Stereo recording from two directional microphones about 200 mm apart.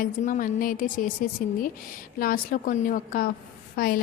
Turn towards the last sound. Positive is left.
turn(degrees=45)  # may be behind; listen again after turning